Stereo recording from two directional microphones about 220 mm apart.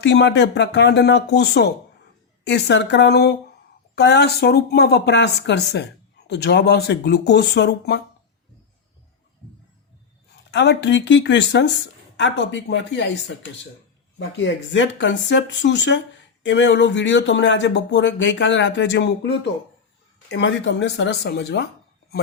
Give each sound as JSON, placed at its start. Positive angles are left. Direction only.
{"t": 0.0, "sound": "speech", "side_deg": 50}
{"t": 10.5, "sound": "speech", "side_deg": 50}